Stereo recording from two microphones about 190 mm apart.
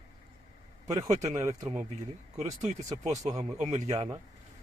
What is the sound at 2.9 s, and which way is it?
Speech, 15° right (ahead or behind).